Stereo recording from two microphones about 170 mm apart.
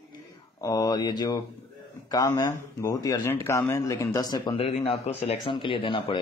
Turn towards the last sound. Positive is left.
turn(degrees=30)  # may be behind; listen again after turning